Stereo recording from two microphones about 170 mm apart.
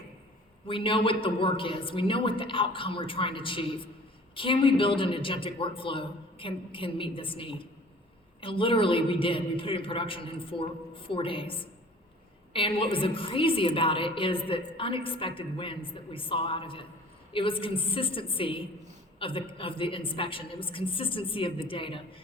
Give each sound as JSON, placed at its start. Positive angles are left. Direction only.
{"t": 0.7, "sound": "a woman's voice", "side_deg": 30}